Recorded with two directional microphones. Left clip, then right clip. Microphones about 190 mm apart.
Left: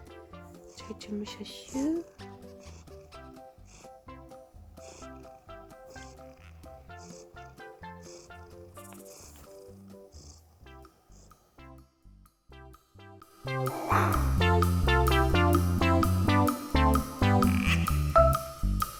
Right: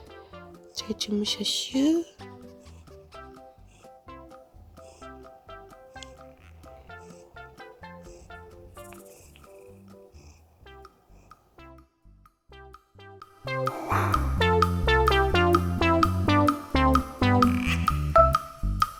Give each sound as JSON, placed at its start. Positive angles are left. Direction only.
{"t": 0.0, "sound": "music", "side_deg": 0}
{"t": 1.0, "sound": "music", "side_deg": -25}
{"t": 2.1, "sound": "music", "side_deg": 0}
{"t": 10.7, "sound": "music", "side_deg": 0}